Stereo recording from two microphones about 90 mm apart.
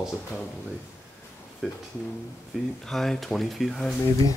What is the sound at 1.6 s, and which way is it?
Speech, 5° right (ahead or behind).